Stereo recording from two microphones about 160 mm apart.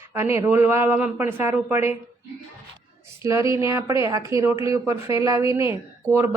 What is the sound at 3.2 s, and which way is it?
A woman's voice, 20° right (ahead or behind).